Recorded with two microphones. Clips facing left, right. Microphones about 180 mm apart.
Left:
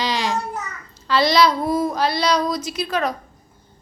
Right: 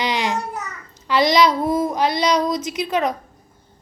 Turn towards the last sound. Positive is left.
turn(degrees=-20)  # may be behind; listen again after turning